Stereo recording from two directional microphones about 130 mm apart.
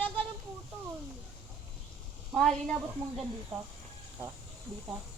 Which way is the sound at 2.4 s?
5° left (ahead or behind).